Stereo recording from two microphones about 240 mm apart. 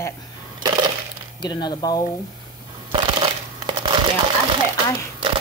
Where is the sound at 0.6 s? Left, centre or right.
Centre.